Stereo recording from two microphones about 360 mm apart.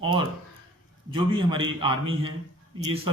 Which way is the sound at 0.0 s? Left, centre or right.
Centre.